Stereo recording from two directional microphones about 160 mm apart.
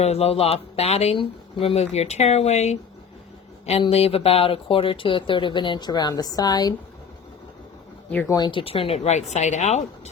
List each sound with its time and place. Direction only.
0.0 s speech: 40° left (ahead or behind); by 6.7 s 25° left (ahead or behind)
8.1 s speech: 10° left (ahead or behind)
8.4 s speech: 30° left (ahead or behind)